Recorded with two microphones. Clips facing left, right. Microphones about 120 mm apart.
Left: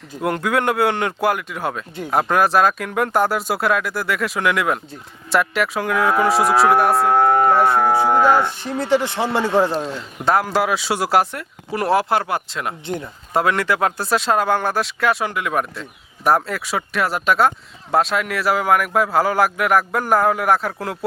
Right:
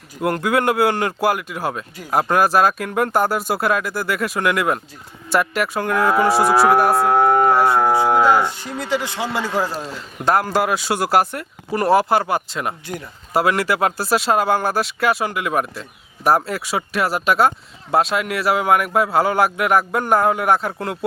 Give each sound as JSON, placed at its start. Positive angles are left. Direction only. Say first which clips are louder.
{"t": 0.2, "sound": "speech", "louder": "right 1 dB", "side_deg": 0}
{"t": 8.0, "sound": "cattle", "louder": "even", "side_deg": -5}
{"t": 8.9, "sound": "speech", "louder": "left 4 dB", "side_deg": 25}
{"t": 9.7, "sound": "speech", "louder": "left 4 dB", "side_deg": 0}
{"t": 12.8, "sound": "speech", "louder": "left 4 dB", "side_deg": 20}
{"t": 13.3, "sound": "speech", "louder": "right 1 dB", "side_deg": -5}